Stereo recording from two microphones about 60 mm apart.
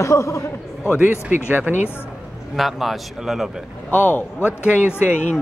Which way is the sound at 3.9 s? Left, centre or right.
Left.